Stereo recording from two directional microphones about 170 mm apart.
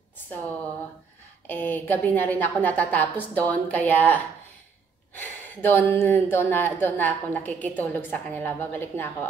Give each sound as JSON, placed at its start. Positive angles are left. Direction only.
{"t": 1.5, "sound": "a woman's voice", "side_deg": 10}
{"t": 5.2, "sound": "a woman's voice", "side_deg": 10}